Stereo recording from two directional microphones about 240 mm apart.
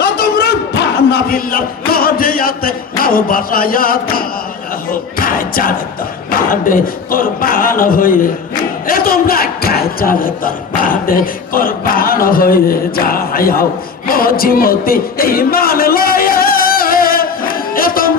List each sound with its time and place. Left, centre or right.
0.0 s a sound: left
1.9 s a man's voice: left
4.9 s music: left
6.5 s a man's voice: left
14.1 s music: left